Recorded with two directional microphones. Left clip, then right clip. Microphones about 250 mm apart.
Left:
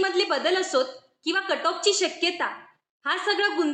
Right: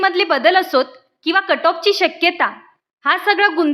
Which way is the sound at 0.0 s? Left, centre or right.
Right.